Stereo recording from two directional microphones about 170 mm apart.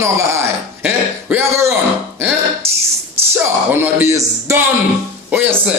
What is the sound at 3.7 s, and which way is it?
Music, 15° right (ahead or behind).